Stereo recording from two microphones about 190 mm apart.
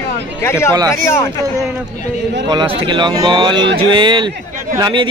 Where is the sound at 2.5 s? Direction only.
30° right (ahead or behind).